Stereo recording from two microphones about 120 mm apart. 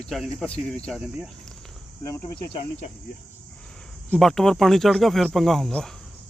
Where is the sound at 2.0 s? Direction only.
35° left (ahead or behind).